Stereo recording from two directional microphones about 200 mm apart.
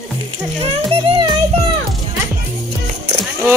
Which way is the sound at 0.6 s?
25° right (ahead or behind).